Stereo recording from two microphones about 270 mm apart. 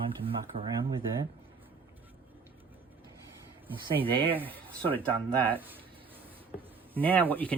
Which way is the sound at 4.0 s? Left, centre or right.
Centre.